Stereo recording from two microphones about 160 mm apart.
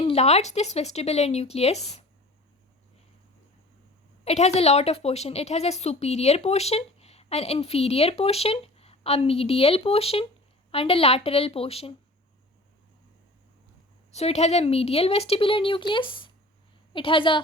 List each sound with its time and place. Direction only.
0.0 s speech: 40° left (ahead or behind)
4.2 s speech: 40° left (ahead or behind)
14.1 s speech: 40° left (ahead or behind)